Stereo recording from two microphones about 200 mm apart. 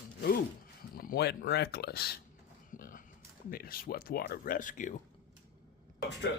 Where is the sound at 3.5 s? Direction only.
50° left (ahead or behind).